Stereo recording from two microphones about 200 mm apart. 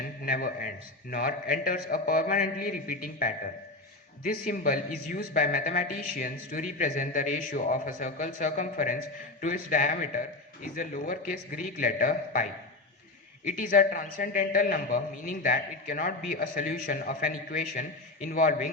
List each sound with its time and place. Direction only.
0.0 s a man's voice: 45° left (ahead or behind)
4.4 s a man's voice: 45° left (ahead or behind)